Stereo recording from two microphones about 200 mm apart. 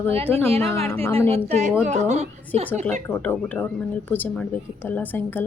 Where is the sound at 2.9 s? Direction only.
10° left (ahead or behind).